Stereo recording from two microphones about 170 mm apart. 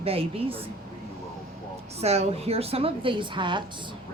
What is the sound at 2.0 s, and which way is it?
A woman's voice, 40° right (ahead or behind).